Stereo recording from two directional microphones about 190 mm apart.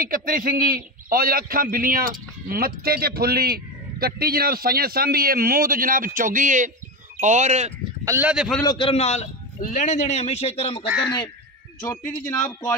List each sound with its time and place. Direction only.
0.0 s a man's voice: 45° right (ahead or behind)
8.0 s a man's voice: 10° right (ahead or behind)
8.6 s a man's voice: 30° left (ahead or behind)
11.8 s speech: 20° left (ahead or behind)
12.4 s speech: 10° left (ahead or behind)